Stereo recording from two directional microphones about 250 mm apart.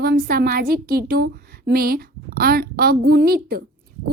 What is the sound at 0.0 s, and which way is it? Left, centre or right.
A woman's voice, right.